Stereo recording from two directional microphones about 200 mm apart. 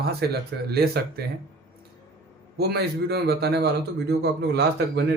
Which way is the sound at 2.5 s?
50° right (ahead or behind).